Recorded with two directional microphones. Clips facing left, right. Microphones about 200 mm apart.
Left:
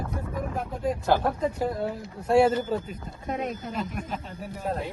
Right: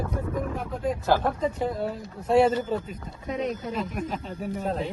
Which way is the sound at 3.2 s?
50° left (ahead or behind).